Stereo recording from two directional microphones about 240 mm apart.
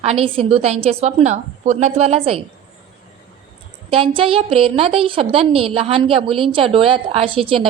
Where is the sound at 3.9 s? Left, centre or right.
Right.